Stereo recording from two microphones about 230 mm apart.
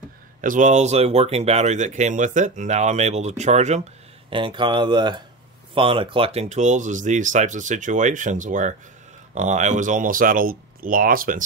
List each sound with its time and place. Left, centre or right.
0.4 s speech: right